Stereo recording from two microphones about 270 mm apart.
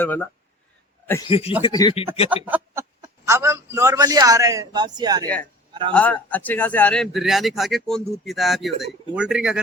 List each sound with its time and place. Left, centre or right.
0.0 s speech: centre
1.3 s speech: left
2.3 s a man's voice: centre
5.9 s a man's voice: centre